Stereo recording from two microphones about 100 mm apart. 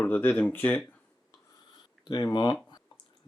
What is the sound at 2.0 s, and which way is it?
Speech, 45° left (ahead or behind).